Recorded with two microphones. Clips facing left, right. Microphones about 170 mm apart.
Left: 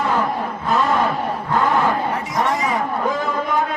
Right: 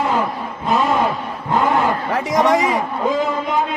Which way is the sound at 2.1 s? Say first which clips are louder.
Right 5 dB; 90° right.